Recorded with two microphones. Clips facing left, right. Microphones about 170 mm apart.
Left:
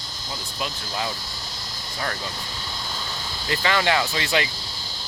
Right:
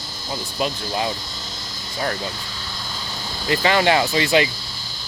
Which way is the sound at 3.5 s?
20° right (ahead or behind).